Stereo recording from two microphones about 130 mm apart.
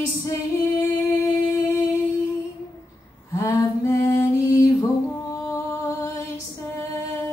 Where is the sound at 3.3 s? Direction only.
25° left (ahead or behind).